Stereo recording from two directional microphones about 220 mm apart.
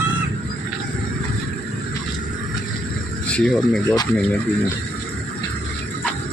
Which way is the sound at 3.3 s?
Centre (ahead or behind).